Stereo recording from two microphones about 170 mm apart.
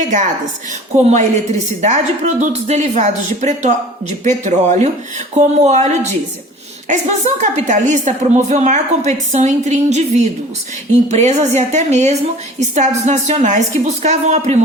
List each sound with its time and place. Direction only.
0.0 s a woman's voice: 45° right (ahead or behind)
11.1 s a woman's voice: 40° right (ahead or behind)